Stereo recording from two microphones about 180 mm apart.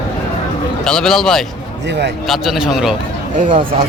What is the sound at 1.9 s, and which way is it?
Speech, 70° right (ahead or behind).